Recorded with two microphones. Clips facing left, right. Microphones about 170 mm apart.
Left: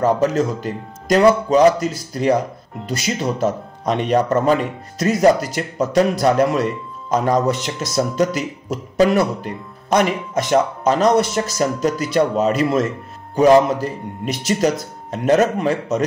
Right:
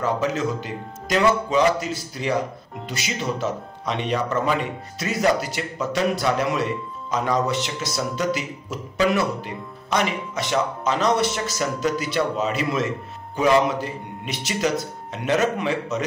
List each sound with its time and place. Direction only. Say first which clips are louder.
0.0 s speech: left 6 dB; 40° left (ahead or behind)
3.3 s speech: left 6 dB; 45° left (ahead or behind)